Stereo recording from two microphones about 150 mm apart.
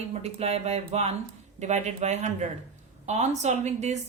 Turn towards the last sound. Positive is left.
turn(degrees=-50)  # may be behind; listen again after turning